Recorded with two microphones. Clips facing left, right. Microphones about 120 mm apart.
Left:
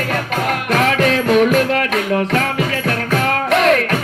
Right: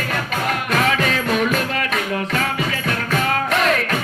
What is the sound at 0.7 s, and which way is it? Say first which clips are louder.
Music: left 5 dB; 60° left (ahead or behind).